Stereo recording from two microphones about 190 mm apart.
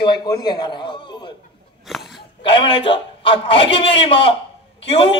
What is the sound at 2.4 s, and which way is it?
A man's voice, 30° left (ahead or behind).